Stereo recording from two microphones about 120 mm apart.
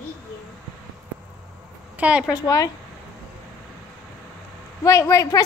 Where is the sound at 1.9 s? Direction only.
10° right (ahead or behind).